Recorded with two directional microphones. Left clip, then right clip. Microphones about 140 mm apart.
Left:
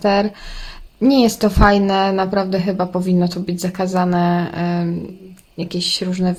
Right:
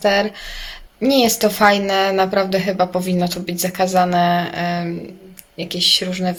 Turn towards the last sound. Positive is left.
turn(degrees=50)  # may be behind; listen again after turning